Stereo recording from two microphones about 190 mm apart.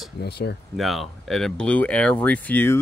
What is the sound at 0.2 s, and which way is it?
Speech, 60° left (ahead or behind).